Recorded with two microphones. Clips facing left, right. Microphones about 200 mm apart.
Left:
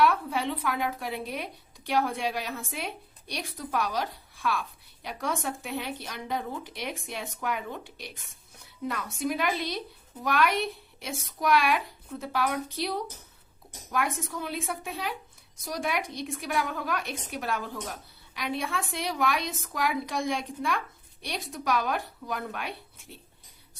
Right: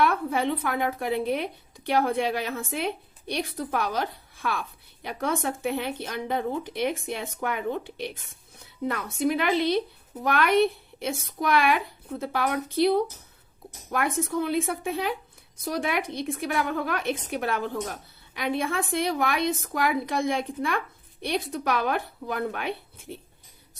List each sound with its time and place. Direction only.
0.0 s a woman's voice: 55° right (ahead or behind)
13.9 s a woman's voice: 55° right (ahead or behind)